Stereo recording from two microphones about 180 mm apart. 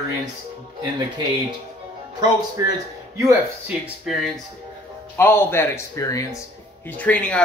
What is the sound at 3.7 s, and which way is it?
Speech, centre (ahead or behind).